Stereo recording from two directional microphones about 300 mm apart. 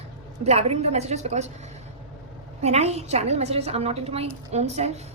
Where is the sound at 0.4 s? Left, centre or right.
Right.